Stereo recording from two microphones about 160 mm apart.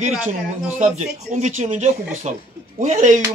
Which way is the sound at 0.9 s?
50° right (ahead or behind).